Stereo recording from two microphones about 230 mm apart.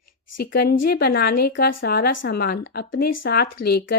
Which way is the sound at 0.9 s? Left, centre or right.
Left.